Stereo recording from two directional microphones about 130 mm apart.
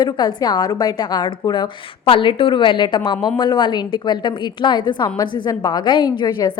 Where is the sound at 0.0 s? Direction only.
30° left (ahead or behind).